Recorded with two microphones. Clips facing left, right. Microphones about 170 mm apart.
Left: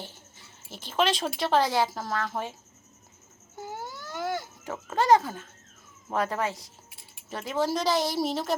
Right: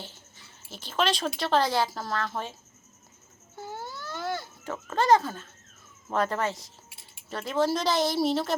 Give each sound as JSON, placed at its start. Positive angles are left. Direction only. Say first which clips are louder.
{"t": 0.9, "sound": "a woman's voice", "louder": "left 1 dB", "side_deg": 15}
{"t": 3.5, "sound": "a sound", "louder": "even", "side_deg": 15}
{"t": 6.1, "sound": "a woman's voice", "louder": "right 1 dB", "side_deg": 10}